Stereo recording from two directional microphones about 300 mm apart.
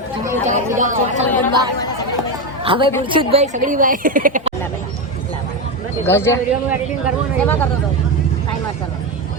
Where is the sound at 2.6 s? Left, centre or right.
Centre.